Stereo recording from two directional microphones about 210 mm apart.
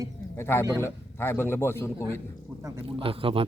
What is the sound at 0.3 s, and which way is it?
A man's voice, 10° left (ahead or behind).